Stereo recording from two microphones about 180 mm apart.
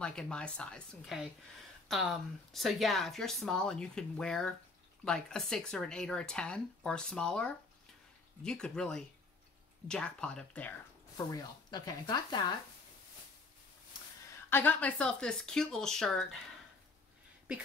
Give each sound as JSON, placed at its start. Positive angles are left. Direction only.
{"t": 0.0, "sound": "speech", "side_deg": 5}
{"t": 11.1, "sound": "speech", "side_deg": 20}
{"t": 14.5, "sound": "speech", "side_deg": 10}